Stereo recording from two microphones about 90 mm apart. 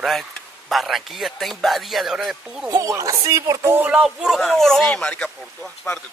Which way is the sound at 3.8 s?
10° right (ahead or behind).